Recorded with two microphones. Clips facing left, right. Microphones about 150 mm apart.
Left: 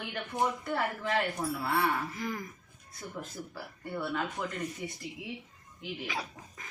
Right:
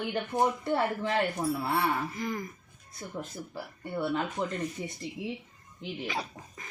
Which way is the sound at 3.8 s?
25° right (ahead or behind).